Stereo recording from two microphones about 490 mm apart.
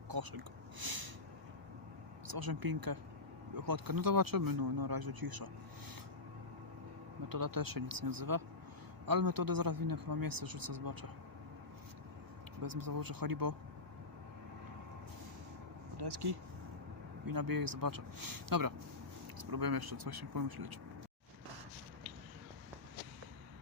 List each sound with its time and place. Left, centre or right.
0.1 s speech: right
2.2 s speech: right
7.3 s a man's voice: right
12.6 s speech: right
16.0 s a man's voice: right